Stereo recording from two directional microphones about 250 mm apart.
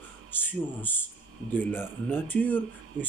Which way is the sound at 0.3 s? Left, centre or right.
Centre.